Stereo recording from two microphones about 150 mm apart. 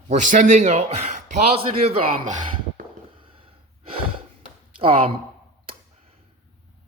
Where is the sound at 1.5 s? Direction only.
40° right (ahead or behind).